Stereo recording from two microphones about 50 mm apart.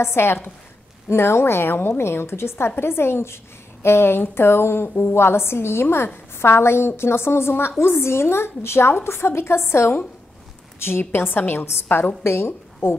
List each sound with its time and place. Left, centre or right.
0.0 s a woman's voice: left